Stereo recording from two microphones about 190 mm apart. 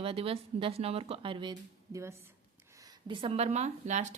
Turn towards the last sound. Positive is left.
turn(degrees=-35)  # may be behind; listen again after turning